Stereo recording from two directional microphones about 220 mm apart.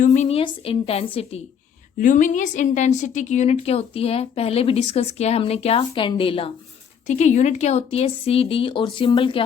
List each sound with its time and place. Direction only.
0.0 s a woman's voice: 35° left (ahead or behind)
2.0 s a woman's voice: 35° left (ahead or behind)